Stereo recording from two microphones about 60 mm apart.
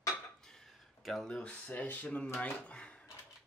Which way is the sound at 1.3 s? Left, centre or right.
Left.